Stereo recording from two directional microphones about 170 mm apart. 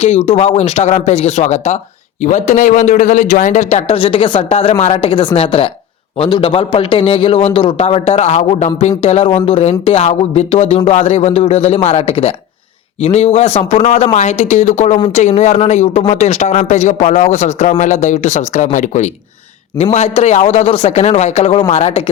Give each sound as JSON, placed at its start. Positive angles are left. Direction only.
{"t": 0.0, "sound": "speech", "side_deg": 40}